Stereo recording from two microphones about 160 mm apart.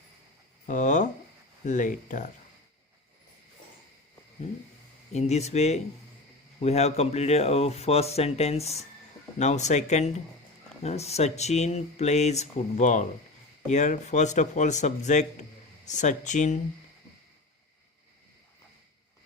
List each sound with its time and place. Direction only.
0.7 s speech: 50° left (ahead or behind)
5.1 s speech: 45° left (ahead or behind)